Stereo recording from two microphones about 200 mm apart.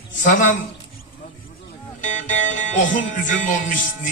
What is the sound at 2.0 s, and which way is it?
Speech, 40° left (ahead or behind).